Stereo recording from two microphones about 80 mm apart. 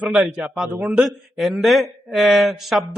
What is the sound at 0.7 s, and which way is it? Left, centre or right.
Speech, right.